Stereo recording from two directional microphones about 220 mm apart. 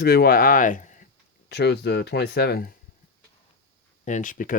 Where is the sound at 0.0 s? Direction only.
45° left (ahead or behind).